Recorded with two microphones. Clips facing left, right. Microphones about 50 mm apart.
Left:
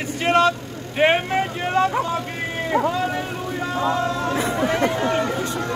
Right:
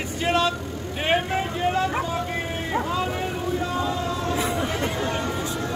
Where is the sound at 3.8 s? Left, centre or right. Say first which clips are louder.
Left 4 dB; left.